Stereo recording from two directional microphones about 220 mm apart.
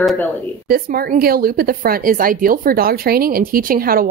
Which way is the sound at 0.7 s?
45° right (ahead or behind).